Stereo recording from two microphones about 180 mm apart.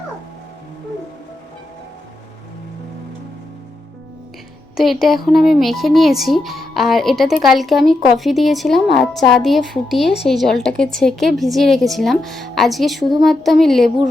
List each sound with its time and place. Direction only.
4.8 s speech: centre (ahead or behind)